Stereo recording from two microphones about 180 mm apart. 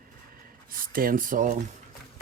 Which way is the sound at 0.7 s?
50° right (ahead or behind).